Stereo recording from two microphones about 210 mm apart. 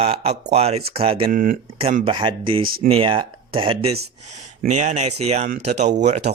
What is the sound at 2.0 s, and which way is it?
Speech, 25° right (ahead or behind).